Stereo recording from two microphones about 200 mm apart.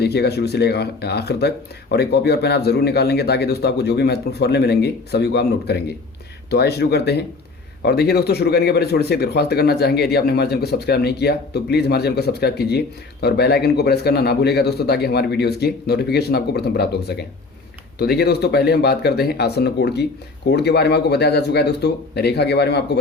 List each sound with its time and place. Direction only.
0.0 s speech: 55° left (ahead or behind)